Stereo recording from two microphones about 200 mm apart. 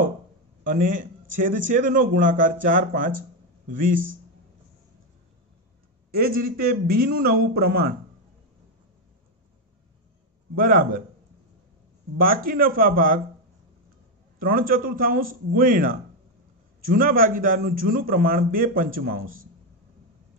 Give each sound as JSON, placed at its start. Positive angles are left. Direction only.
{"t": 0.7, "sound": "a man's voice", "side_deg": -40}
{"t": 6.1, "sound": "a man's voice", "side_deg": -50}
{"t": 10.5, "sound": "a man's voice", "side_deg": -45}
{"t": 12.4, "sound": "a man's voice", "side_deg": -45}
{"t": 14.4, "sound": "a man's voice", "side_deg": -45}